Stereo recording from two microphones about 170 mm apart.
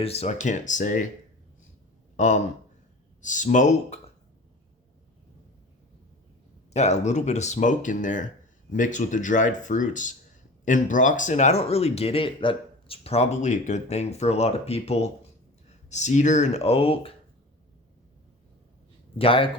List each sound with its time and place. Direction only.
0.0 s speech: 35° left (ahead or behind)
2.1 s speech: 45° left (ahead or behind)
6.7 s speech: 40° left (ahead or behind)
19.2 s speech: 30° left (ahead or behind)